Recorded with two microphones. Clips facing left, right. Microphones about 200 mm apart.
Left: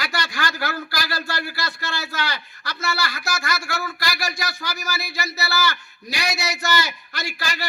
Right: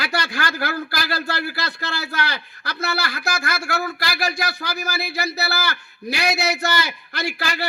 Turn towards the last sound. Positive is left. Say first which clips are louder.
# right 4 dB
turn(degrees=-60)  # may be behind; listen again after turning